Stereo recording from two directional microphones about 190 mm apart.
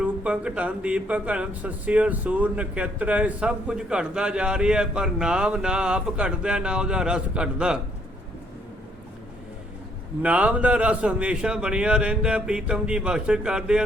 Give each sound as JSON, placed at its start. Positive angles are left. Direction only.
{"t": 0.0, "sound": "speech", "side_deg": -5}
{"t": 10.2, "sound": "speech", "side_deg": -5}